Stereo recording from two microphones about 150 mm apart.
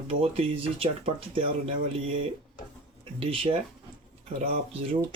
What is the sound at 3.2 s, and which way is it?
Speech, 40° right (ahead or behind).